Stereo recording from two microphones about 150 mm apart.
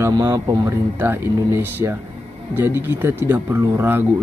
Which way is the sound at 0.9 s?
15° right (ahead or behind).